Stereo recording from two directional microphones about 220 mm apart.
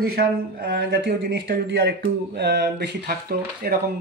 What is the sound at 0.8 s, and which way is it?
Speech, 55° right (ahead or behind).